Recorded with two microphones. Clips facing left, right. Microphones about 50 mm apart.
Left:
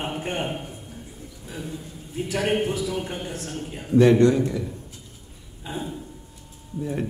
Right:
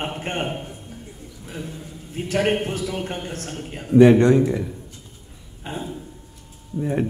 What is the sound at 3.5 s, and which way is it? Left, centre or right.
A man's voice, right.